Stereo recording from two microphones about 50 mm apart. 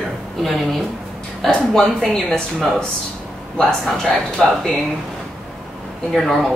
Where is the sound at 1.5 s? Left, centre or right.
Centre.